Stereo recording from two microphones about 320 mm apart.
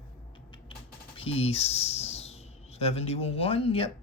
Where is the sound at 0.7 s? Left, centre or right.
Centre.